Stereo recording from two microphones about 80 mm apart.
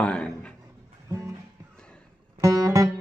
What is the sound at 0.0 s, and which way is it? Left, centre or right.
Speech, centre.